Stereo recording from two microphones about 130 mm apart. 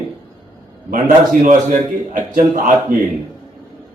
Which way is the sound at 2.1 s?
90° right.